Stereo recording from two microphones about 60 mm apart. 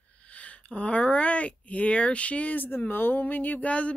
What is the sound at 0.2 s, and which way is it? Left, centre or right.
Speech, left.